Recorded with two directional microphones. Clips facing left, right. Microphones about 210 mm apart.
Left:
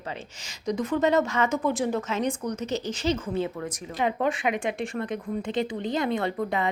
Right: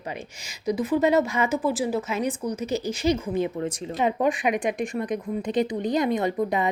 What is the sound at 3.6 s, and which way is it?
Speech, 25° right (ahead or behind).